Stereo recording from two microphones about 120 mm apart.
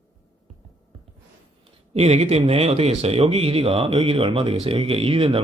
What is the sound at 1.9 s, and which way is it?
Speech, 60° right (ahead or behind).